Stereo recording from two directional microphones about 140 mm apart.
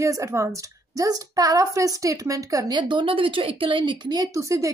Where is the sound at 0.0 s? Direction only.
20° right (ahead or behind).